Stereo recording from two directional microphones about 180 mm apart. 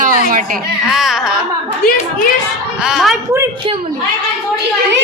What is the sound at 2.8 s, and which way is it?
Music, centre (ahead or behind).